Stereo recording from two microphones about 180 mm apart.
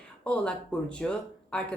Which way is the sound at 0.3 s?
5° left (ahead or behind).